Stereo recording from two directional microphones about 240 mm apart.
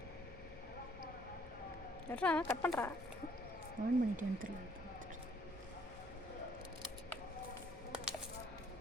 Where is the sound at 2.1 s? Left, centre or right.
Centre.